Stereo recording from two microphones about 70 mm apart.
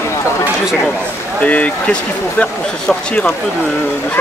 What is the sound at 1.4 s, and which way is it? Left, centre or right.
Speech, centre.